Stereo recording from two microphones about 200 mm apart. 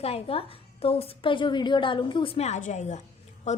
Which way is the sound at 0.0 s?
30° left (ahead or behind).